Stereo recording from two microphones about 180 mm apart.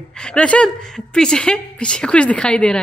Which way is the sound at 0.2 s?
5° left (ahead or behind).